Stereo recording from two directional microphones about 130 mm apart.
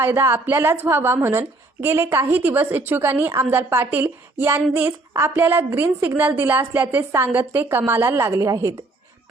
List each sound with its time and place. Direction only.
0.0 s a woman's voice: 20° right (ahead or behind)